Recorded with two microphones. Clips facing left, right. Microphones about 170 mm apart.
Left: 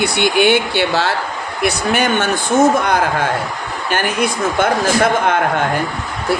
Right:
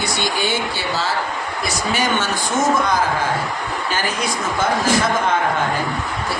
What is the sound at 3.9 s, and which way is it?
A man's voice, 60° left (ahead or behind).